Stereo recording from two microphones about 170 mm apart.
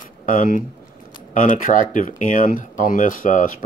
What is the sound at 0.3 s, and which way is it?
Speech, 55° left (ahead or behind).